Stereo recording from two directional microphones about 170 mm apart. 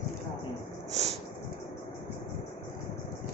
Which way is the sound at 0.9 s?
40° right (ahead or behind).